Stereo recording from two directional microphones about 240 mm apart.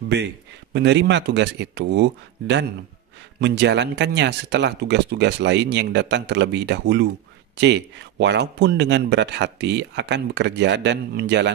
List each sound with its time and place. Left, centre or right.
0.7 s speech: right